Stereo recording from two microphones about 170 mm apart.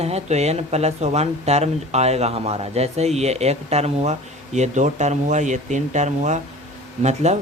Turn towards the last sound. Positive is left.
turn(degrees=-40)  # may be behind; listen again after turning